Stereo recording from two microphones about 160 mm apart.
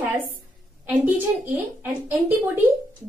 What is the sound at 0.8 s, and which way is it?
A woman's voice, 10° right (ahead or behind).